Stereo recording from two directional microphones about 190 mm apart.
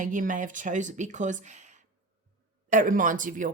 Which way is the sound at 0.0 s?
45° right (ahead or behind).